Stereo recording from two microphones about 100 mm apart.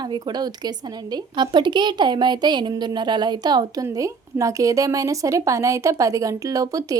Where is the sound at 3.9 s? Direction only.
35° right (ahead or behind).